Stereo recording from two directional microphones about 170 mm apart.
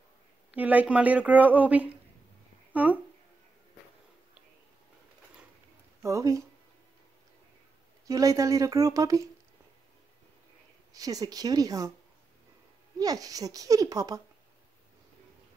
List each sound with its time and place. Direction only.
0.5 s speech: 10° right (ahead or behind)
6.0 s speech: 20° right (ahead or behind)
8.1 s speech: 20° right (ahead or behind)
10.9 s speech: 20° right (ahead or behind)
13.0 s speech: 20° right (ahead or behind)